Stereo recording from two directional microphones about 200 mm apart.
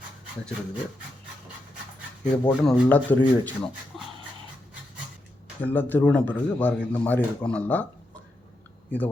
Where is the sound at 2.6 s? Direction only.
10° left (ahead or behind).